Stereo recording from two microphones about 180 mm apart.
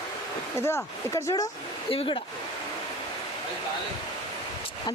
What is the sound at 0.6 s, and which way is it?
A man's voice, 15° left (ahead or behind).